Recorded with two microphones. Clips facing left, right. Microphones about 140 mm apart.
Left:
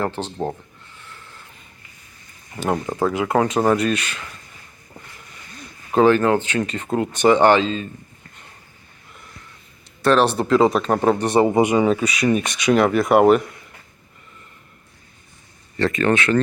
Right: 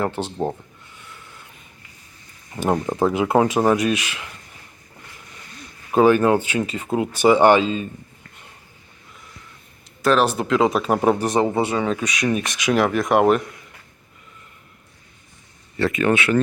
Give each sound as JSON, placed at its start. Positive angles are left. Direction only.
{"t": 0.2, "sound": "speech", "side_deg": -10}
{"t": 0.9, "sound": "a sound", "side_deg": -10}
{"t": 2.8, "sound": "speech", "side_deg": -15}
{"t": 3.5, "sound": "speech", "side_deg": -5}
{"t": 5.9, "sound": "speech", "side_deg": -10}
{"t": 10.0, "sound": "speech", "side_deg": 0}
{"t": 11.3, "sound": "speech", "side_deg": 10}
{"t": 11.9, "sound": "speech", "side_deg": 0}
{"t": 15.8, "sound": "speech", "side_deg": -5}